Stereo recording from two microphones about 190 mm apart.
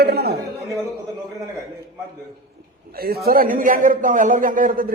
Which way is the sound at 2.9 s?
55° right (ahead or behind).